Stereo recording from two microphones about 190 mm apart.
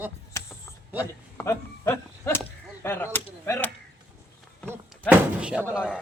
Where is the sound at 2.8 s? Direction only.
15° left (ahead or behind).